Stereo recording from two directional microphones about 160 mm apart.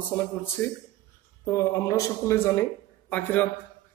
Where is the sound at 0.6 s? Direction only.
15° left (ahead or behind).